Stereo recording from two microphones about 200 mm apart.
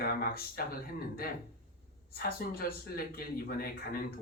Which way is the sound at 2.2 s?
50° left (ahead or behind).